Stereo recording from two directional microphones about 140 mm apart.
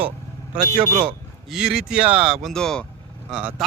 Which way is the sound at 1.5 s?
5° right (ahead or behind).